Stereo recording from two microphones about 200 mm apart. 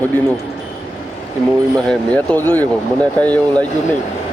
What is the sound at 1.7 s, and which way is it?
Speech, 5° left (ahead or behind).